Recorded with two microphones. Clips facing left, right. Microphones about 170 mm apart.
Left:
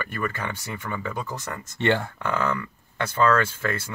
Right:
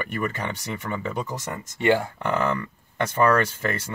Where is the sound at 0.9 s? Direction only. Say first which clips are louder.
Right 2 dB; 20° right (ahead or behind).